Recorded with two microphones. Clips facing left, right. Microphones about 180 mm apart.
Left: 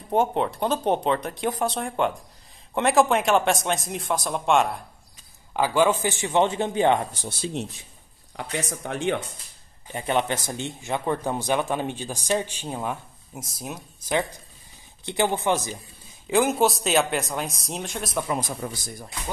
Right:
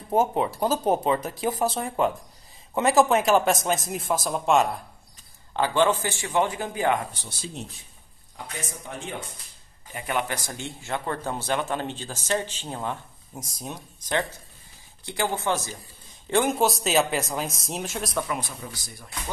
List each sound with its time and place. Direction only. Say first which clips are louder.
0.1 s a man's voice: even; 5° right (ahead or behind); by 7.0 s 25° left (ahead or behind)
7.2 s speech: left 7 dB; 70° left (ahead or behind)
9.9 s speech: left 4 dB; 25° left (ahead or behind)
16.3 s speech: left 2 dB; 5° left (ahead or behind)
18.6 s a man's voice: left 7 dB; 55° left (ahead or behind)